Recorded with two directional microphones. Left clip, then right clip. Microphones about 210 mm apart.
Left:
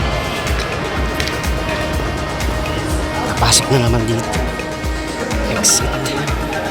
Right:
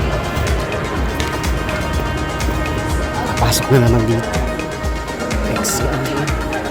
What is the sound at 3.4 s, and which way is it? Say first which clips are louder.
Speech: left 1 dB; 15° right (ahead or behind).